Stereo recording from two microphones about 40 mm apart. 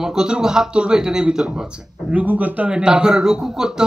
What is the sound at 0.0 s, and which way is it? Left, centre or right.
Speech, centre.